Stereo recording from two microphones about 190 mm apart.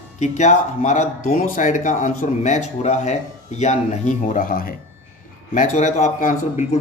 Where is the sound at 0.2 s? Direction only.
40° left (ahead or behind).